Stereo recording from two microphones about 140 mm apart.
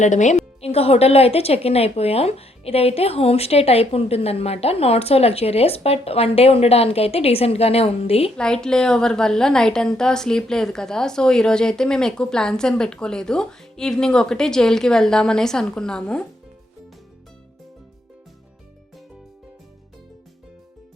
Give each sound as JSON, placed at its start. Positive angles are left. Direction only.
{"t": 0.0, "sound": "a woman's voice", "side_deg": 60}
{"t": 8.4, "sound": "a woman's voice", "side_deg": 5}